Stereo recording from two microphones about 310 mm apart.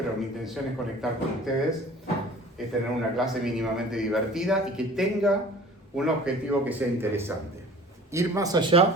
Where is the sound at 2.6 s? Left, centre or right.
Centre.